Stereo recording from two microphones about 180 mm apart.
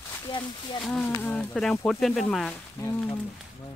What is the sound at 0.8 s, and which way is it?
Speech, 5° left (ahead or behind).